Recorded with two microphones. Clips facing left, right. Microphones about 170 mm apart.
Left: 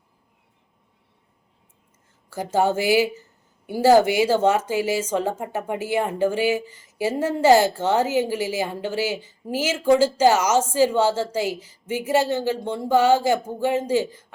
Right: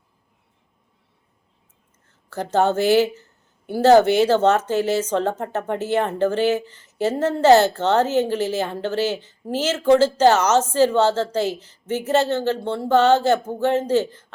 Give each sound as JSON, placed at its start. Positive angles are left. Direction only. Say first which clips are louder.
{"t": 2.3, "sound": "speech", "louder": "right 2 dB", "side_deg": 10}